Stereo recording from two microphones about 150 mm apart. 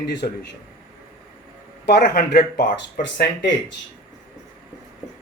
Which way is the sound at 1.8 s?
90° left.